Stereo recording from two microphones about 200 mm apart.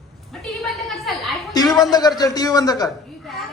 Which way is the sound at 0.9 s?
Centre (ahead or behind).